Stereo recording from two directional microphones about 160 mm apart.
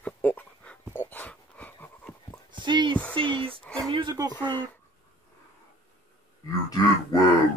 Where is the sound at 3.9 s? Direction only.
25° right (ahead or behind).